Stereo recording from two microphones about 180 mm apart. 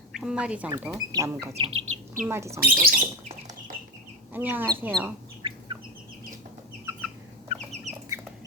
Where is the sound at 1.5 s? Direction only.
30° right (ahead or behind).